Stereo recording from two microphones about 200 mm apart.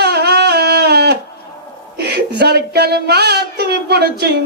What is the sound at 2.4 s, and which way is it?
Speech, 55° right (ahead or behind).